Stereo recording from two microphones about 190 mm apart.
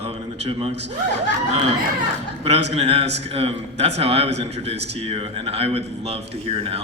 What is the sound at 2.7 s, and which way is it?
A man's voice, 30° right (ahead or behind).